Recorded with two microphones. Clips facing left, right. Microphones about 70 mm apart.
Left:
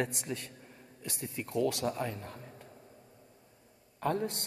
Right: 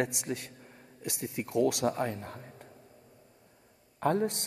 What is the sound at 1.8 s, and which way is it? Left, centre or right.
Speech, right.